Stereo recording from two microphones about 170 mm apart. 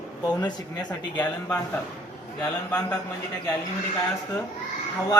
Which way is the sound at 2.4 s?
5° left (ahead or behind).